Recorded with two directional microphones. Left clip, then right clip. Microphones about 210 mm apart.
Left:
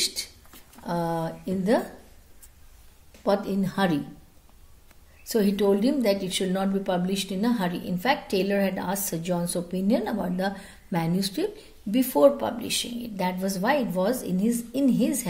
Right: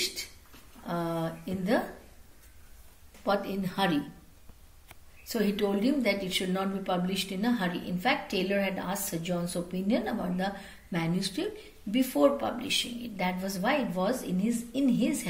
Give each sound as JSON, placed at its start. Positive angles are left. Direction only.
{"t": 0.0, "sound": "a sound", "side_deg": 50}
{"t": 3.3, "sound": "a woman's voice", "side_deg": 55}
{"t": 5.2, "sound": "a woman's voice", "side_deg": 50}